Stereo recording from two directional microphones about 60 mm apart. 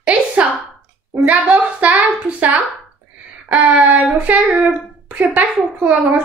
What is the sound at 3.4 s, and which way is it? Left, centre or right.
Child singing, right.